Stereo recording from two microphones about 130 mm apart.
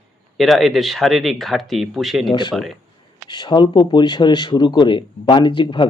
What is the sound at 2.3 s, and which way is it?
Speech, 40° left (ahead or behind).